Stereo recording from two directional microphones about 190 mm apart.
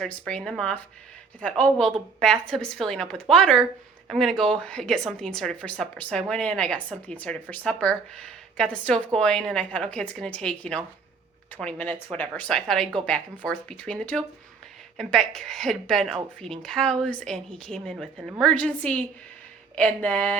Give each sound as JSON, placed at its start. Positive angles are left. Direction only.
{"t": 0.0, "sound": "speech", "side_deg": 5}